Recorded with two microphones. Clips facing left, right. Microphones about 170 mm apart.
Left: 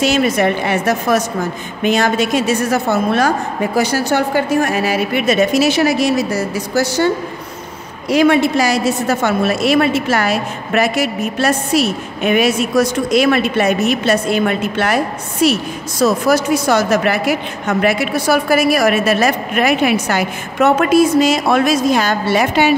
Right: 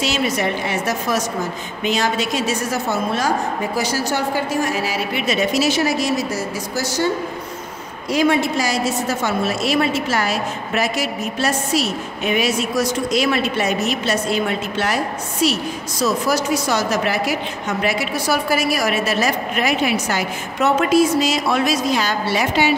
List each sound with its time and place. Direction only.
0.0 s a woman's voice: 55° left (ahead or behind)
8.1 s a woman's voice: 70° left (ahead or behind); by 22.8 s 55° left (ahead or behind)